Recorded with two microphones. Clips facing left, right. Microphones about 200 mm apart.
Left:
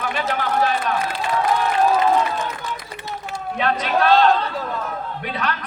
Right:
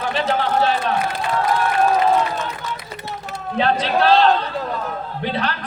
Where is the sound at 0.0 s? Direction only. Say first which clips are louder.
Right 3 dB; 30° right (ahead or behind).